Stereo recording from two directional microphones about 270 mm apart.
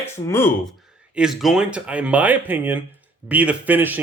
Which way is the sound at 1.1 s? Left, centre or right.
Centre.